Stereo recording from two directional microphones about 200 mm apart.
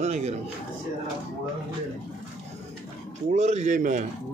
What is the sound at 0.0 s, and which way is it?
Speech, 35° right (ahead or behind).